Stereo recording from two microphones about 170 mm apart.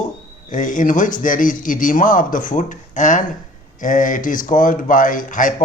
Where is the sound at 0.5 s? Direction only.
50° left (ahead or behind).